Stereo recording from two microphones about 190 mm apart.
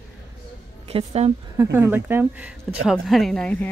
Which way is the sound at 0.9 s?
35° right (ahead or behind).